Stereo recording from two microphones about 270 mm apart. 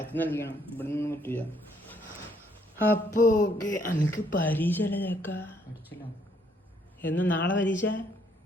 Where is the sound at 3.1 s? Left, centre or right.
Left.